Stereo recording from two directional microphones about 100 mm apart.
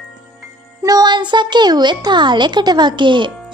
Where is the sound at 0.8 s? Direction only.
45° right (ahead or behind).